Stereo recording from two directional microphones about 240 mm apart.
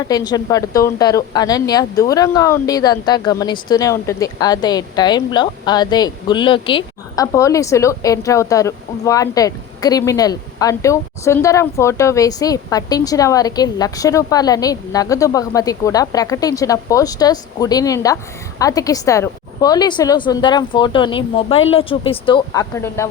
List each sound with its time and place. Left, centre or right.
0.0 s a woman's voice: centre